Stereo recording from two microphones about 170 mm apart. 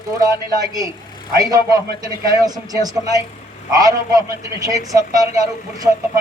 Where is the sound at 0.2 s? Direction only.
20° right (ahead or behind).